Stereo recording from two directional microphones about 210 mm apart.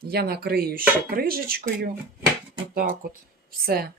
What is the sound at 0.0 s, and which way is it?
Speech, 50° right (ahead or behind).